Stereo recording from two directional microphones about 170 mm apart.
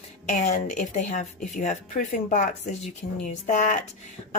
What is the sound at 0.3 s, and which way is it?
Speech, 45° left (ahead or behind).